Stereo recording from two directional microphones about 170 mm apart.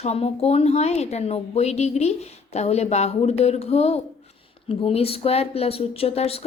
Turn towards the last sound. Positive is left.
turn(degrees=35)  # may be behind; listen again after turning